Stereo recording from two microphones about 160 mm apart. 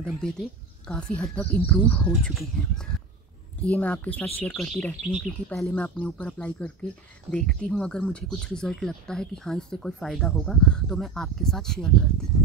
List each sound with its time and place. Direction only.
0.0 s speech: centre (ahead or behind)
3.6 s speech: 10° left (ahead or behind)